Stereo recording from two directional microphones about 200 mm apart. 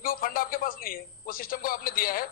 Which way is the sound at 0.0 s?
45° left (ahead or behind).